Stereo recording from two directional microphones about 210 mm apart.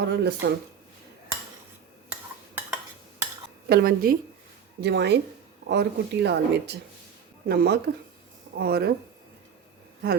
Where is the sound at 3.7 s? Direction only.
45° right (ahead or behind).